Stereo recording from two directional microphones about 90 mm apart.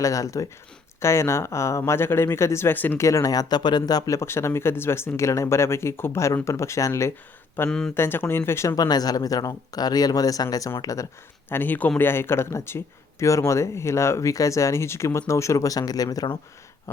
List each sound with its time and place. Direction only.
0.0 s speech: 40° left (ahead or behind); by 3.0 s 20° left (ahead or behind)
3.0 s speech: 35° left (ahead or behind)
7.7 s speech: 10° left (ahead or behind)
7.9 s speech: 25° left (ahead or behind)
8.7 s speech: 45° left (ahead or behind)
11.4 s speech: 20° left (ahead or behind); by 16.2 s 45° left (ahead or behind)